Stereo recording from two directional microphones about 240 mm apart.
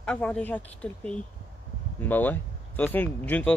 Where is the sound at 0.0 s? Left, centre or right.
Centre.